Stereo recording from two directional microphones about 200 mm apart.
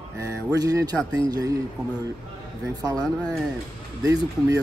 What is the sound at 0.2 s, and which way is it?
Speech, 15° right (ahead or behind).